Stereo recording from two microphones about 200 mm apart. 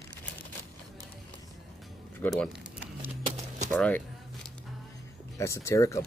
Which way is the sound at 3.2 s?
35° right (ahead or behind).